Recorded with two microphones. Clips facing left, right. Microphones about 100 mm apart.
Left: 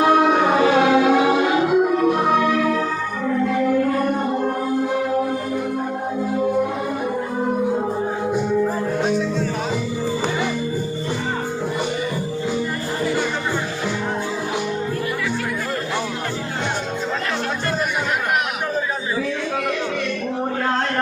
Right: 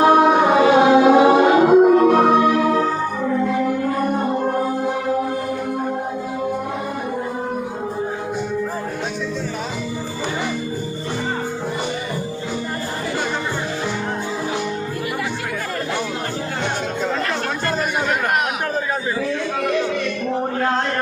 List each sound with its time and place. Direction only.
0.0 s music: 25° right (ahead or behind); by 2.2 s 50° right (ahead or behind)
2.4 s music: 25° right (ahead or behind)